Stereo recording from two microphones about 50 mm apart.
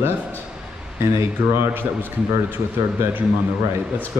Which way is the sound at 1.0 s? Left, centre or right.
Right.